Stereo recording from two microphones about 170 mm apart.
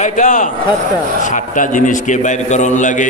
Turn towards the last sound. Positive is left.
turn(degrees=45)  # may be behind; listen again after turning